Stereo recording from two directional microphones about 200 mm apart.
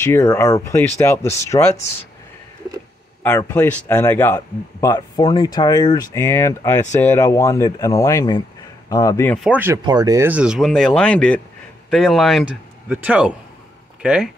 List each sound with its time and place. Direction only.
0.0 s speech: 15° left (ahead or behind)
3.3 s speech: 10° left (ahead or behind)
9.4 s speech: 10° right (ahead or behind)
9.8 s speech: 20° right (ahead or behind); by 14.3 s 5° right (ahead or behind)